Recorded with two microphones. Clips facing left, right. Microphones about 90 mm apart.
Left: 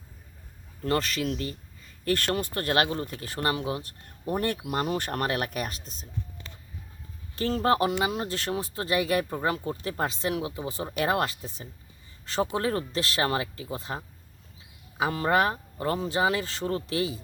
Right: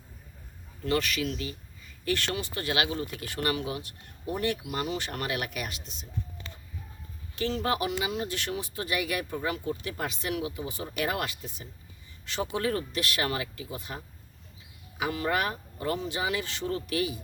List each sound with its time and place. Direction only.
0.9 s speech: 35° left (ahead or behind)
7.3 s speech: 40° left (ahead or behind)